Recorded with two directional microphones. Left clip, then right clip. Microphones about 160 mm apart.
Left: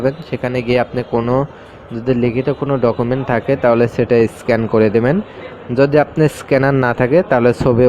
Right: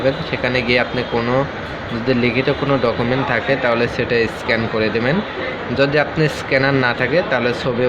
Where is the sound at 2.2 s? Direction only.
65° left (ahead or behind).